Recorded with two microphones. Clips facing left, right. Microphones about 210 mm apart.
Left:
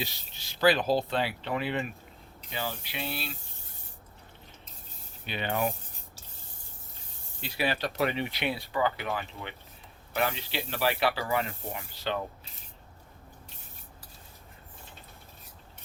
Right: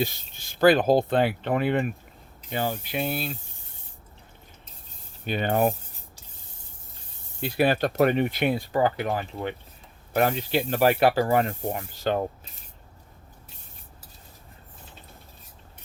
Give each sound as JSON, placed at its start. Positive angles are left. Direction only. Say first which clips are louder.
{"t": 0.0, "sound": "speech", "louder": "right 9 dB", "side_deg": -50}
{"t": 5.2, "sound": "speech", "louder": "right 7 dB", "side_deg": -45}
{"t": 7.4, "sound": "speech", "louder": "right 8 dB", "side_deg": -50}